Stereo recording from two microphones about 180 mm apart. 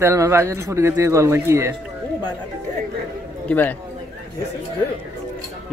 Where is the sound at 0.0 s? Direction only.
15° right (ahead or behind).